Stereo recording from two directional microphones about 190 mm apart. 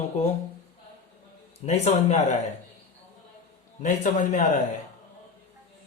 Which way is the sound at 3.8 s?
40° left (ahead or behind).